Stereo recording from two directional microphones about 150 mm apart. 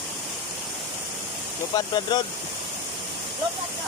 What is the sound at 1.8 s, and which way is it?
Speech, 30° left (ahead or behind).